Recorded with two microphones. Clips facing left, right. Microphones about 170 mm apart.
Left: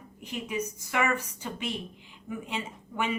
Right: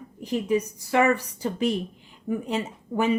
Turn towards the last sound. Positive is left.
turn(degrees=-40)  # may be behind; listen again after turning